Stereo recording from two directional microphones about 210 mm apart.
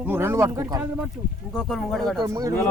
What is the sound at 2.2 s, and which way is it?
Speech, 15° right (ahead or behind).